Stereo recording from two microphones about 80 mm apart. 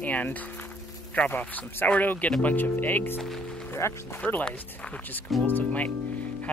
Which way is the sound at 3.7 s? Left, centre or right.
Left.